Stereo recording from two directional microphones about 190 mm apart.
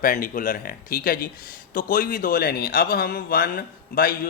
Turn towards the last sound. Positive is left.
turn(degrees=50)  # may be behind; listen again after turning